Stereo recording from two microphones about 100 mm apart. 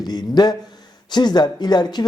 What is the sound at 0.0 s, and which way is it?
Speech, 45° left (ahead or behind).